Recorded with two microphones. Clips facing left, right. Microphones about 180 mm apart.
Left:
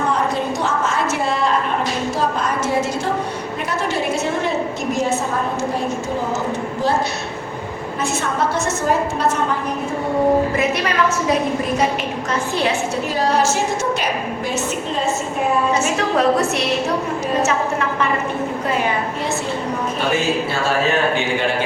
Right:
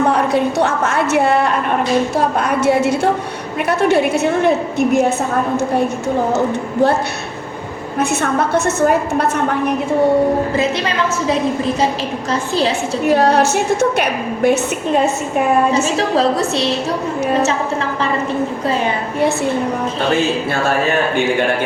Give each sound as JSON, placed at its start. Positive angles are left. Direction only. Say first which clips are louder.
{"t": 0.1, "sound": "a woman's voice", "louder": "right 5 dB", "side_deg": -65}
{"t": 7.9, "sound": "a woman's voice", "louder": "right 5 dB", "side_deg": -60}
{"t": 10.6, "sound": "a woman's voice", "louder": "right 1 dB", "side_deg": -25}
{"t": 13.1, "sound": "a woman's voice", "louder": "right 6 dB", "side_deg": -60}
{"t": 16.0, "sound": "a woman's voice", "louder": "right 1 dB", "side_deg": -30}